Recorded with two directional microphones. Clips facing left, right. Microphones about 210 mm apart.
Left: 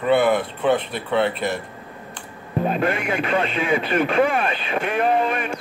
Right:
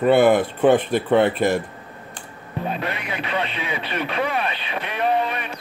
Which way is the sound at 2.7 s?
50° left (ahead or behind).